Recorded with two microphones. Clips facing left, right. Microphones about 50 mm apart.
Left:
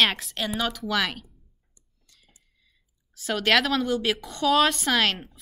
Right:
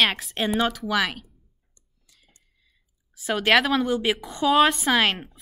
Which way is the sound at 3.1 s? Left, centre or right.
Centre.